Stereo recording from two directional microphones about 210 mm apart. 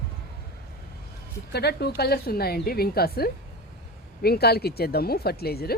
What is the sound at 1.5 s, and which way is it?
Speech, 50° left (ahead or behind).